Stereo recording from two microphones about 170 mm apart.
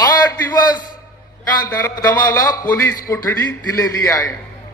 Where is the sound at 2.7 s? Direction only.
15° left (ahead or behind).